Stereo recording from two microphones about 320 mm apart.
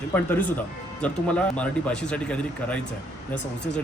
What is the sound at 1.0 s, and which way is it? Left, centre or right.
A man's voice, centre.